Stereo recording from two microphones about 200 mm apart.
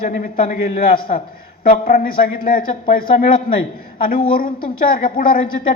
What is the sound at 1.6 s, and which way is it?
Speech, 45° left (ahead or behind).